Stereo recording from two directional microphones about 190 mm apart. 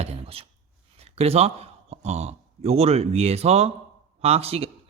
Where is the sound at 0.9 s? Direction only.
35° right (ahead or behind).